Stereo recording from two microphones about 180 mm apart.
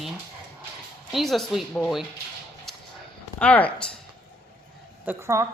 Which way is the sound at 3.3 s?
10° left (ahead or behind).